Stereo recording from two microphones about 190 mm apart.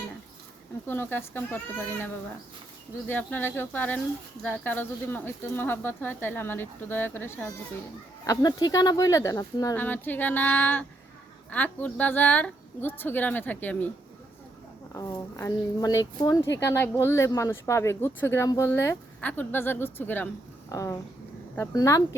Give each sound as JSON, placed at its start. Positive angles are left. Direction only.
{"t": 0.9, "sound": "speech", "side_deg": 10}
{"t": 14.9, "sound": "speech", "side_deg": 15}